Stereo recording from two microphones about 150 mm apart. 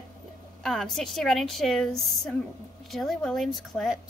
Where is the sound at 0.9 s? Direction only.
5° left (ahead or behind).